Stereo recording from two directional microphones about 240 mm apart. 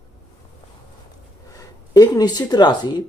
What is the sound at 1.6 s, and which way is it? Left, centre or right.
Speech, centre.